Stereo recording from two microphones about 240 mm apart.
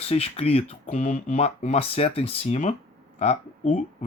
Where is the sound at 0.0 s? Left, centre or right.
Left.